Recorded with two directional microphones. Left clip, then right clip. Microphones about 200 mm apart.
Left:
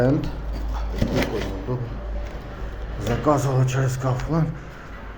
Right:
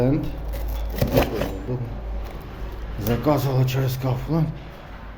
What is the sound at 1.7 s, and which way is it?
Speech, 10° right (ahead or behind).